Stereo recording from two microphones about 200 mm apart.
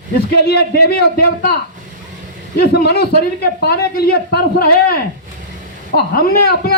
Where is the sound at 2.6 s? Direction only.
50° left (ahead or behind).